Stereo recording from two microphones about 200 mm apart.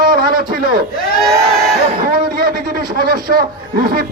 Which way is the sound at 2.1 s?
45° right (ahead or behind).